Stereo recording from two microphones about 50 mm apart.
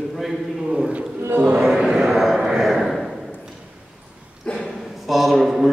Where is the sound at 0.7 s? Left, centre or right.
Right.